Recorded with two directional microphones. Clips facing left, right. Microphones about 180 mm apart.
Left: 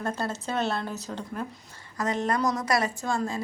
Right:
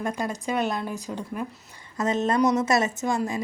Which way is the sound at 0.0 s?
15° right (ahead or behind).